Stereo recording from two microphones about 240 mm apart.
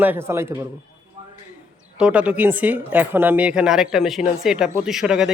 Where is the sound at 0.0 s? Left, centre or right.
Centre.